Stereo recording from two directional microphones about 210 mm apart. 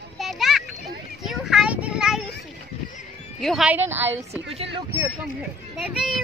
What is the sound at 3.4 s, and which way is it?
A woman's voice, centre (ahead or behind).